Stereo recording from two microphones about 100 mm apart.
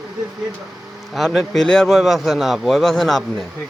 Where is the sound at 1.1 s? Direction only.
Centre (ahead or behind).